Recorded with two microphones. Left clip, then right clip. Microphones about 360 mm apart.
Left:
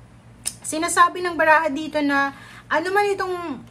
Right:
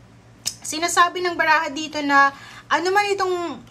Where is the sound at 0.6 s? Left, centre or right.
Centre.